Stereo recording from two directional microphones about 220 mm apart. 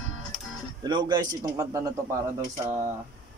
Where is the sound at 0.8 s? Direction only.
20° right (ahead or behind).